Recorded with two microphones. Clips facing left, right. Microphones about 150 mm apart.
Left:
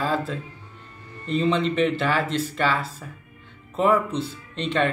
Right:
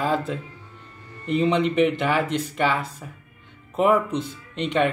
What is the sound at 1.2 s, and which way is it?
Speech, 15° right (ahead or behind).